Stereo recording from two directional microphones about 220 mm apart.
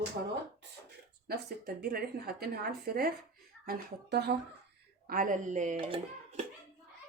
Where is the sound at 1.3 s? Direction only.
45° right (ahead or behind); by 6.4 s 25° right (ahead or behind).